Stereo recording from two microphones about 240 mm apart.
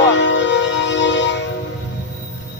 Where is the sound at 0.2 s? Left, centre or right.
Left.